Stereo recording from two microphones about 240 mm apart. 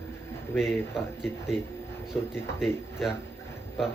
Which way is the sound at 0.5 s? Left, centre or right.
Centre.